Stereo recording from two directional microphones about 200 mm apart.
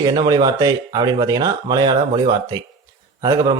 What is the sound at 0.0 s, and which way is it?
Speech, 20° right (ahead or behind).